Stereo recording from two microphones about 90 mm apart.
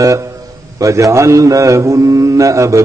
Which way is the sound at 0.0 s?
35° right (ahead or behind).